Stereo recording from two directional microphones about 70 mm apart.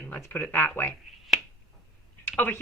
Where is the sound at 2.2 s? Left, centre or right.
Left.